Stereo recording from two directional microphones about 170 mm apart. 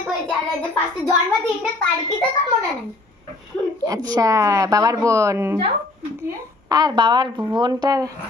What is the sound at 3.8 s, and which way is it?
A woman's voice, 20° right (ahead or behind).